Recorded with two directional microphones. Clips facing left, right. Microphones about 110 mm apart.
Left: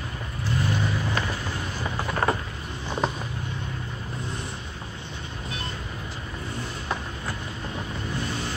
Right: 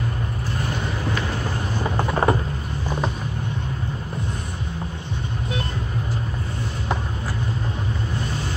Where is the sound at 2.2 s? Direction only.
20° right (ahead or behind).